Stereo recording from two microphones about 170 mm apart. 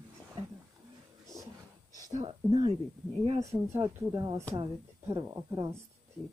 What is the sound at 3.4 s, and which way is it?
Speech, 15° right (ahead or behind).